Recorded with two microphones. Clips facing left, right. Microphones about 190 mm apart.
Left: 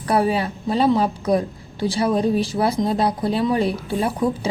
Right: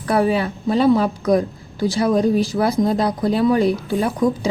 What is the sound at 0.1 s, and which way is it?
A woman's voice, 35° left (ahead or behind).